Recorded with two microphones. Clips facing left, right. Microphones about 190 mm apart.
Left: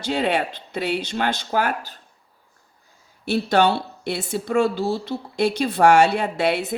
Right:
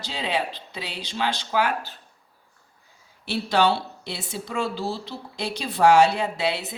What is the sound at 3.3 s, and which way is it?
Speech, 50° left (ahead or behind).